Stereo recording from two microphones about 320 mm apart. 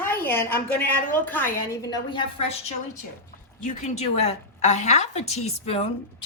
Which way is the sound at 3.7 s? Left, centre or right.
Left.